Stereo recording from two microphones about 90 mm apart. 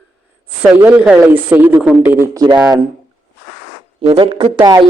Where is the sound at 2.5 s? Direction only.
50° right (ahead or behind).